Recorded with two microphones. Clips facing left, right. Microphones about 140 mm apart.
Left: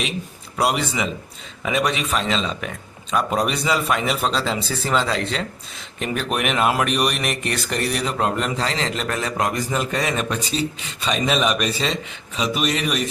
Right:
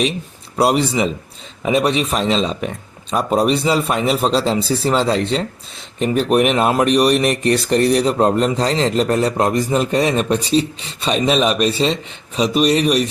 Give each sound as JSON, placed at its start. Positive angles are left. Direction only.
{"t": 0.5, "sound": "speech", "side_deg": -35}